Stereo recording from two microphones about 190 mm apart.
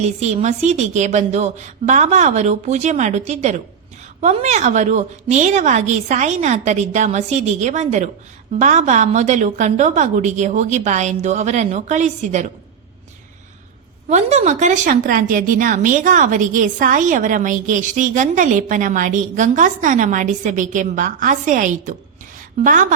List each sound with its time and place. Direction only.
0.0 s a woman's voice: 35° right (ahead or behind)
14.1 s speech: 35° right (ahead or behind)